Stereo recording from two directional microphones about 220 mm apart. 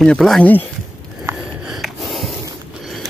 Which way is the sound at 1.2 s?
5° right (ahead or behind).